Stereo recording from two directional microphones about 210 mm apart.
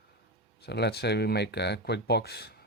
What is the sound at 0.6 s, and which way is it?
Speech, 50° left (ahead or behind).